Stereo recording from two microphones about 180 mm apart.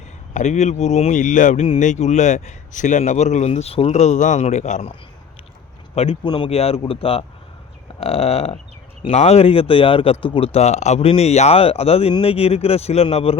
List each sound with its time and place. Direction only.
0.3 s speech: 40° left (ahead or behind)
5.9 s speech: 35° left (ahead or behind)